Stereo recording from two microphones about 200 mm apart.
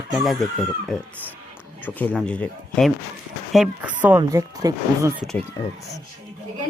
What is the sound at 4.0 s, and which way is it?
Speech, 10° right (ahead or behind).